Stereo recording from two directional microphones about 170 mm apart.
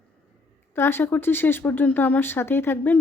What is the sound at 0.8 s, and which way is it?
Speech, 15° left (ahead or behind).